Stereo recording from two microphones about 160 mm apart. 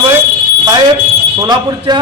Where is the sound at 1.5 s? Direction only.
25° right (ahead or behind).